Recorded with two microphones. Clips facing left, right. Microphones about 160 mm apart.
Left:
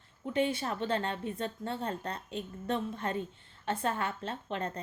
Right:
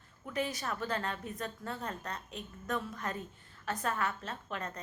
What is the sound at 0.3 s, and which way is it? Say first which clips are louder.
A woman's voice: left 5 dB; 30° left (ahead or behind).